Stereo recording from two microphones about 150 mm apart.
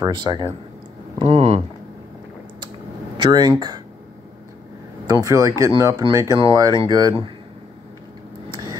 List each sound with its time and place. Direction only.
0.0 s speech: 30° right (ahead or behind)
1.1 s speech: 40° right (ahead or behind)
3.2 s speech: 30° right (ahead or behind)
5.0 s speech: 25° right (ahead or behind)
8.5 s a sound: 25° right (ahead or behind)